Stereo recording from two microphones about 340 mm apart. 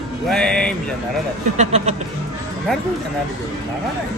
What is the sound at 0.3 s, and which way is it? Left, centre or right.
Speech, centre.